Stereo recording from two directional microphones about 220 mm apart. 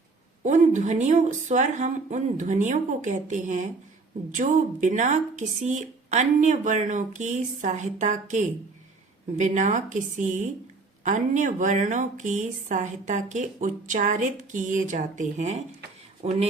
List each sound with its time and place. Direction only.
0.4 s speech: 35° right (ahead or behind)